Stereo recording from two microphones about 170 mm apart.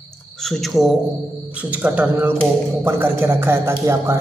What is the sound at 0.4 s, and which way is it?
Speech, centre (ahead or behind).